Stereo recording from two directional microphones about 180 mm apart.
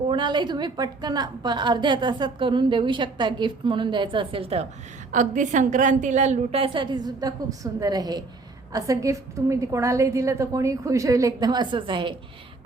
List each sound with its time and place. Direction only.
0.1 s a woman's voice: 25° right (ahead or behind)
5.1 s a woman's voice: 45° right (ahead or behind); by 12.1 s 25° right (ahead or behind)